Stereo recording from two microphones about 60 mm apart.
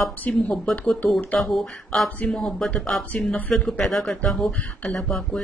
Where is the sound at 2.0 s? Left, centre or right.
Left.